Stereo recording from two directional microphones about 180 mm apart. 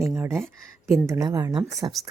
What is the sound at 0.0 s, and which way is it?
A woman's voice, 10° right (ahead or behind).